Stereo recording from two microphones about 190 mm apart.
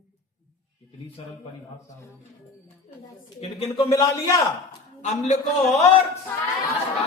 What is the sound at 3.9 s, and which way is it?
Speech, 15° left (ahead or behind).